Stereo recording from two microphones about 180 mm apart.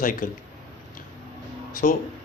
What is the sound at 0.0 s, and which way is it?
Speech, 50° left (ahead or behind).